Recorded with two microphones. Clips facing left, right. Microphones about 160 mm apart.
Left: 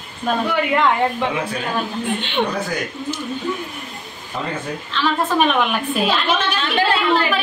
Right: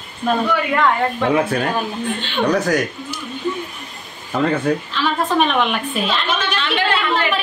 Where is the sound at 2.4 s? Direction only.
80° right.